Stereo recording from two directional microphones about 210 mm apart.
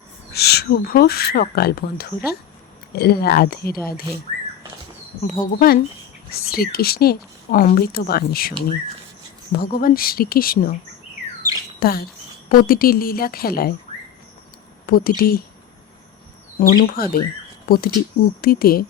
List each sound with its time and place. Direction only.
0.3 s speech: 50° left (ahead or behind)
5.4 s speech: 45° left (ahead or behind)
11.8 s speech: 45° left (ahead or behind)
14.8 s speech: 45° left (ahead or behind)
16.6 s speech: 45° left (ahead or behind)